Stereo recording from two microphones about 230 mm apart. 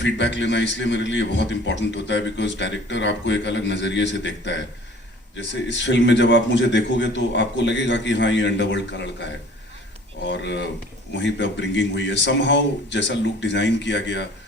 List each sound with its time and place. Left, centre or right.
0.0 s a man's voice: left
5.4 s a man's voice: left
10.2 s a man's voice: left